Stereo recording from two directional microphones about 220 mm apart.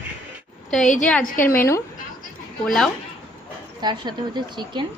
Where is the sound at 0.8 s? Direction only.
35° left (ahead or behind).